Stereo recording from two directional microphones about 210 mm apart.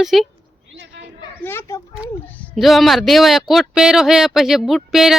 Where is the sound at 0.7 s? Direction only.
55° right (ahead or behind).